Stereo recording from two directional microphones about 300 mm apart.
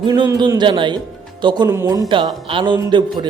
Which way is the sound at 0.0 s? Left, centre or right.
Centre.